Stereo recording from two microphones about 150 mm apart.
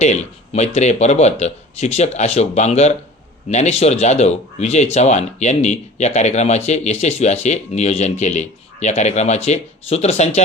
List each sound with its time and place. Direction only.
0.0 s speech: 50° left (ahead or behind)